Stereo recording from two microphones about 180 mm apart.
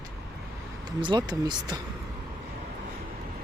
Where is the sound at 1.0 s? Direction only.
25° right (ahead or behind).